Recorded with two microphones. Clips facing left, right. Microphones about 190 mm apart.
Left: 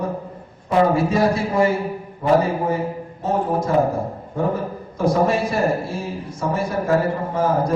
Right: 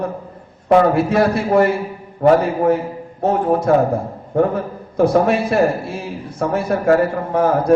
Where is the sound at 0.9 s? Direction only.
65° right (ahead or behind).